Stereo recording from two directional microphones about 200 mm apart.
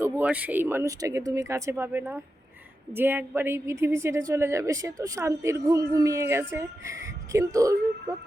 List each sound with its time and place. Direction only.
0.0 s a woman's voice: 10° right (ahead or behind)